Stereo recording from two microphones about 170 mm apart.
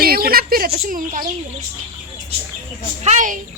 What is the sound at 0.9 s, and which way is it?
Speech, 50° right (ahead or behind).